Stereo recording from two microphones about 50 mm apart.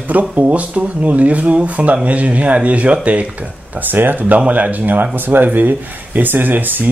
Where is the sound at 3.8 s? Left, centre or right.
Right.